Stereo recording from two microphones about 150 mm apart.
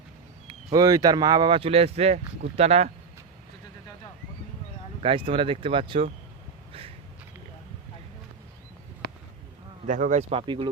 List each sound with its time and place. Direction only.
0.4 s speech: 25° right (ahead or behind); by 2.9 s 45° right (ahead or behind)
5.0 s speech: 35° right (ahead or behind)
9.8 s speech: 55° right (ahead or behind)
10.4 s speech: 30° right (ahead or behind)